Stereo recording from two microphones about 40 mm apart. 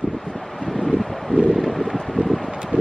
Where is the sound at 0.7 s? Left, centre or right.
Centre.